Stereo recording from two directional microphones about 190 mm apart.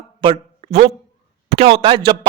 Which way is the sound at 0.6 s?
35° right (ahead or behind).